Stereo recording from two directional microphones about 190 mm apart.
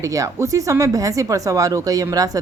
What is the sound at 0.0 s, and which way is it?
Speech, 15° right (ahead or behind).